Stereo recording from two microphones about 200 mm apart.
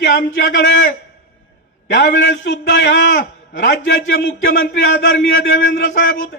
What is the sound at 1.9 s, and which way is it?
A man's voice, 55° left (ahead or behind).